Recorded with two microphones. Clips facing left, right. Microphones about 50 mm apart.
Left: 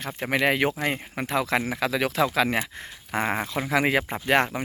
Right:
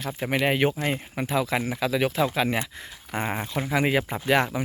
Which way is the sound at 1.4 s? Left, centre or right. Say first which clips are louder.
Left 1 dB; left.